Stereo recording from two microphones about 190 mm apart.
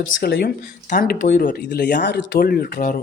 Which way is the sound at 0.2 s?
55° left (ahead or behind).